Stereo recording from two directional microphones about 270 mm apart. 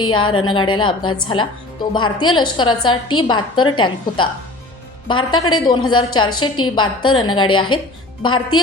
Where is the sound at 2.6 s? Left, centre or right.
Centre.